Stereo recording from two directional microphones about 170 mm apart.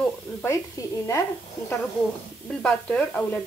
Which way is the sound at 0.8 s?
20° left (ahead or behind).